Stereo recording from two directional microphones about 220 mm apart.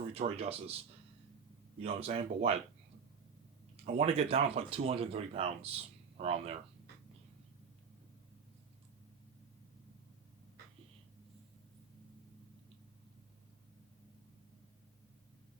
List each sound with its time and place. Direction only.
0.1 s speech: 25° right (ahead or behind)
1.8 s speech: 25° right (ahead or behind)
3.9 s speech: 30° right (ahead or behind)